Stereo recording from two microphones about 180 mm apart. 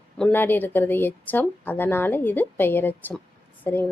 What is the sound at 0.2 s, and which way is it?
A woman's voice, 10° left (ahead or behind).